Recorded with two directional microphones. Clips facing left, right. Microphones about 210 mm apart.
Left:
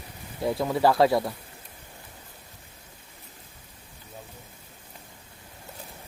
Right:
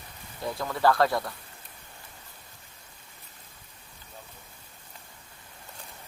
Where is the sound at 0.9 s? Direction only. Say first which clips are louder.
Left 2 dB; 5° left (ahead or behind).